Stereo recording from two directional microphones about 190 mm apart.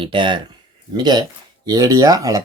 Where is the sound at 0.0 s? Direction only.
25° right (ahead or behind).